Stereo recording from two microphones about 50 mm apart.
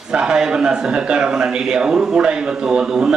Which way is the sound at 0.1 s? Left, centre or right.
Centre.